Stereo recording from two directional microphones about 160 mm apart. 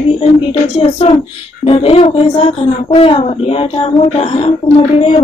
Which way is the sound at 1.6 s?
35° left (ahead or behind).